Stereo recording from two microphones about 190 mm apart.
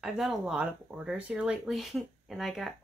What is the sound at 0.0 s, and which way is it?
Speech, centre (ahead or behind).